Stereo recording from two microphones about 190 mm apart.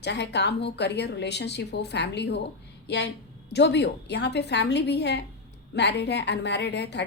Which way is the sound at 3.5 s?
65° left (ahead or behind).